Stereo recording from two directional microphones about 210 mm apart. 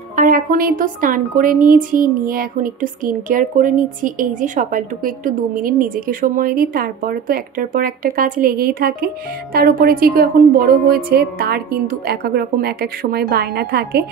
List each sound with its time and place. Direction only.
0.1 s a woman's voice: 40° right (ahead or behind)